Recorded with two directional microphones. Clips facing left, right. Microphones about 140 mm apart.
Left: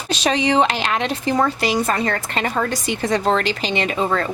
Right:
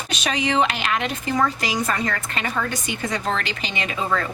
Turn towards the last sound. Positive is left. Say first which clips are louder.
# left 4 dB
turn(degrees=30)  # may be behind; listen again after turning